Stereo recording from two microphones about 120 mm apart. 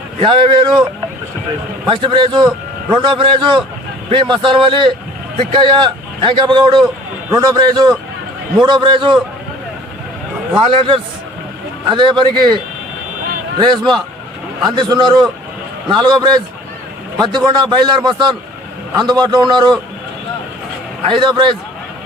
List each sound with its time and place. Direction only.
0.2 s speech: 45° right (ahead or behind)
1.9 s a man's voice: 45° right (ahead or behind)
7.3 s a man's voice: 30° right (ahead or behind)
10.6 s a man's voice: 45° right (ahead or behind)
14.8 s a man's voice: 35° right (ahead or behind)
21.1 s a man's voice: 40° right (ahead or behind)